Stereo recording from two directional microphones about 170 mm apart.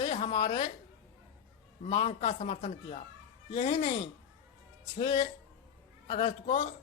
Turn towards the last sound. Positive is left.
turn(degrees=30)  # may be behind; listen again after turning